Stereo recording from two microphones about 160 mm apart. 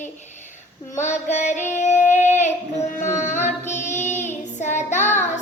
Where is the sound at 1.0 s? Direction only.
45° left (ahead or behind).